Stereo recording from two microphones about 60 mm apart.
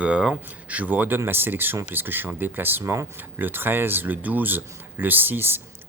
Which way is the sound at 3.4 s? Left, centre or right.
Right.